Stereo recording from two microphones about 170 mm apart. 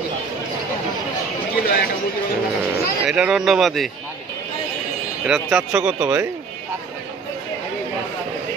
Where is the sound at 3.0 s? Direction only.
5° right (ahead or behind).